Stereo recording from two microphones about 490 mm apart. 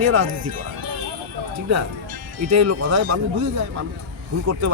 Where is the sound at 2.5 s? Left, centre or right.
Right.